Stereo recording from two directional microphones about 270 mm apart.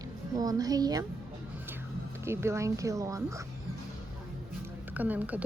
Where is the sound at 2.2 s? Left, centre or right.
Centre.